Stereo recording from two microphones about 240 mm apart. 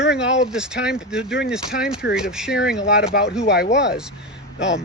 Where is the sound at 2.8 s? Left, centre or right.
Left.